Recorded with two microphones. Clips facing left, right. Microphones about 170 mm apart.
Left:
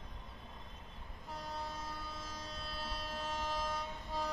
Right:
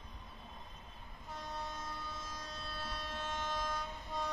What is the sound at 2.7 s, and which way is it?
Train, 30° left (ahead or behind).